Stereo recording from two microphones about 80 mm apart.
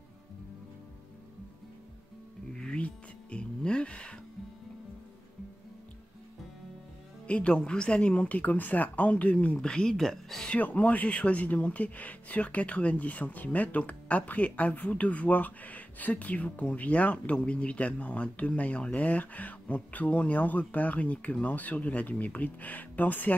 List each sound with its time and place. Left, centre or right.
2.5 s music: centre
7.2 s speech: centre
10.5 s speech: centre